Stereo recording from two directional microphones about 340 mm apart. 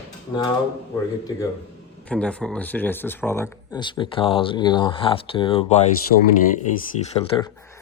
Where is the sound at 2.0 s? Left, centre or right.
Centre.